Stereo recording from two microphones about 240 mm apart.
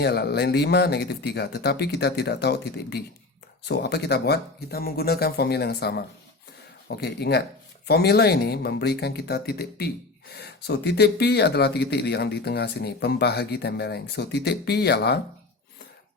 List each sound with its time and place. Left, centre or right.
0.0 s speech: left